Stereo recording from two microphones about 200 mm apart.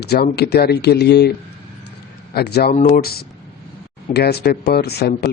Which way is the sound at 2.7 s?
40° left (ahead or behind).